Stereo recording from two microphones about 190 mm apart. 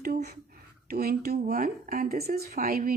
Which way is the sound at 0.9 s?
55° right (ahead or behind).